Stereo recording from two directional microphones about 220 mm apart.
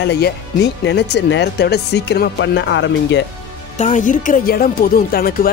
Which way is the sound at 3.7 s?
35° left (ahead or behind).